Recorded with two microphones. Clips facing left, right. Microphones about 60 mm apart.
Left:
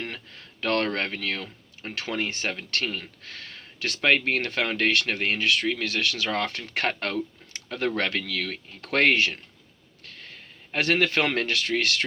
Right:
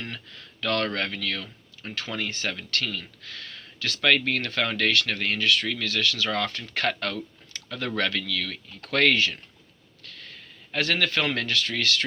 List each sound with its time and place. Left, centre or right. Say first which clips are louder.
0.0 s speech: left 2 dB; left